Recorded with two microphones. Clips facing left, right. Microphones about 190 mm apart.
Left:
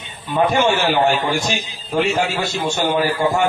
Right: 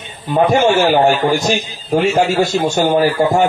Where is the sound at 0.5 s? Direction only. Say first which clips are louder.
Right 6 dB; 45° right (ahead or behind).